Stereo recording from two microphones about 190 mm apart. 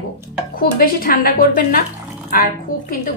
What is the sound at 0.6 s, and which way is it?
A woman's voice, 50° left (ahead or behind).